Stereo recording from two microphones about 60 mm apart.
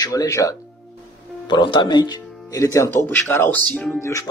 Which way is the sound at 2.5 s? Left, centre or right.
Left.